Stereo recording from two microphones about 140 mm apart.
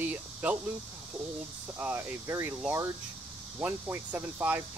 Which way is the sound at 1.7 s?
10° right (ahead or behind).